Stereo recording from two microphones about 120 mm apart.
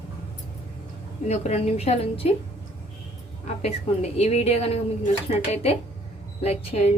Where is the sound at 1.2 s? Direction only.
65° left (ahead or behind).